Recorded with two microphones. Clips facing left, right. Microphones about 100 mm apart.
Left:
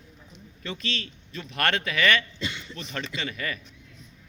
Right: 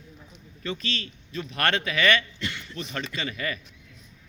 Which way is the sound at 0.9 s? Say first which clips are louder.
Even; 35° right (ahead or behind).